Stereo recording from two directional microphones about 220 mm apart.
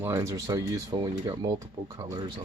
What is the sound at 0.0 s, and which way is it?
Speech, 15° right (ahead or behind).